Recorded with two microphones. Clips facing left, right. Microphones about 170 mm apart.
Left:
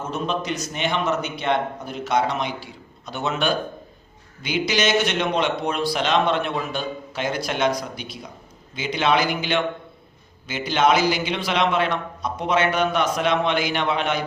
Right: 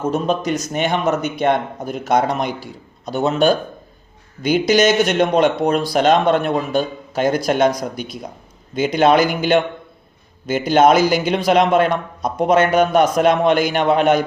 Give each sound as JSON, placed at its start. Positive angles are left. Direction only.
{"t": 0.1, "sound": "a man's voice", "side_deg": -45}